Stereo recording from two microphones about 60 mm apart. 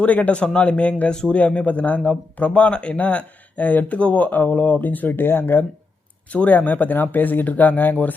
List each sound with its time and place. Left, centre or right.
0.0 s speech: left
6.3 s speech: left